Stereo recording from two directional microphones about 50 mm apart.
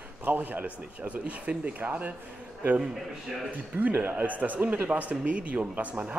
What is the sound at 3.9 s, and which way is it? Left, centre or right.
A man's voice, right.